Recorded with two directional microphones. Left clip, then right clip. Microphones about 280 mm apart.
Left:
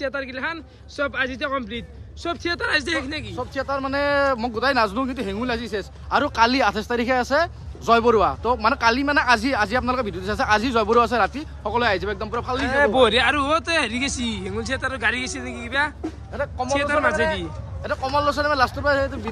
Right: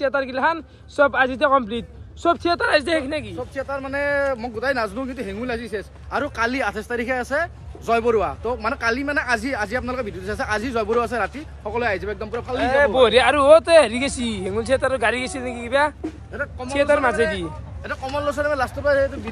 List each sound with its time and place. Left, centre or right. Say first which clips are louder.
0.0 s speech: right 6 dB; centre
3.3 s speech: left 2 dB; left; by 15.9 s centre
17.1 s speech: right 1 dB; left